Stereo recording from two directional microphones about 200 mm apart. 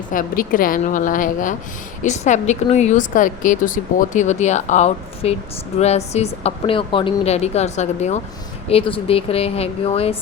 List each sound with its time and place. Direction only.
0.1 s a woman's voice: 45° left (ahead or behind)